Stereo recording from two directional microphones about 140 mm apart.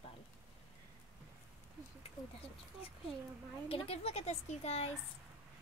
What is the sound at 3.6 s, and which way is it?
Speech, 45° left (ahead or behind).